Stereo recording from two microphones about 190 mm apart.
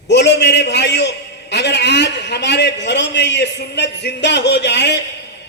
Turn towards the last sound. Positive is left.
turn(degrees=65)  # may be behind; listen again after turning